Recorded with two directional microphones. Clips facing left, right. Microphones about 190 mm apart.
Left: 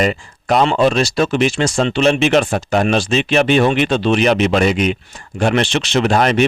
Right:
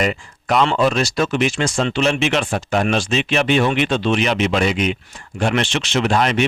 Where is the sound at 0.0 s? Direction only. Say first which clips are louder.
Left 3 dB; 35° left (ahead or behind).